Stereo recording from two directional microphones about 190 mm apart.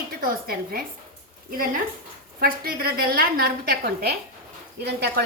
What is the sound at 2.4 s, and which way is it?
A woman's voice, 55° right (ahead or behind).